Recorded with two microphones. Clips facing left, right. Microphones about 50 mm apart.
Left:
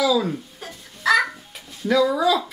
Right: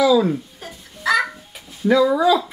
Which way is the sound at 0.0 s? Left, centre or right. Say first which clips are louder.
Right 5 dB; centre.